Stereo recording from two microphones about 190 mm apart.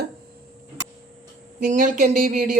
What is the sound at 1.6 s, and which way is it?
Speech, 45° right (ahead or behind).